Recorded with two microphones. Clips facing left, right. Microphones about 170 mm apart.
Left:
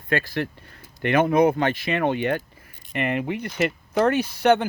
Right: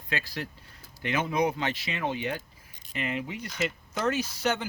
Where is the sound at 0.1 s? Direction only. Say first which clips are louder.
Left 9 dB; 55° left (ahead or behind).